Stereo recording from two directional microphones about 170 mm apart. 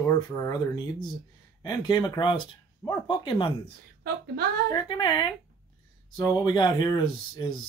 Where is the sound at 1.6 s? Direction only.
25° left (ahead or behind).